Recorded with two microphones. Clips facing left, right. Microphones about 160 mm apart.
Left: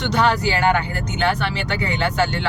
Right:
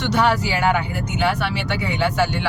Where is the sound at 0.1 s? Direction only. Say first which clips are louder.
Even; 5° right (ahead or behind).